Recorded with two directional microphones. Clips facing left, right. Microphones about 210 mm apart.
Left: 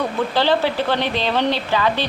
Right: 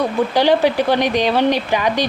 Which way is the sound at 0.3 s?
15° right (ahead or behind).